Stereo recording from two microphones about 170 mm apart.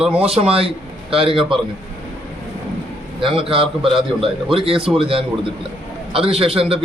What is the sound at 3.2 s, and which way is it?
A man's voice, 30° right (ahead or behind).